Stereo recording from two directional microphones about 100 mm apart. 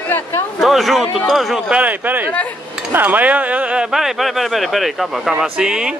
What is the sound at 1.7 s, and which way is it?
Speech, 15° right (ahead or behind).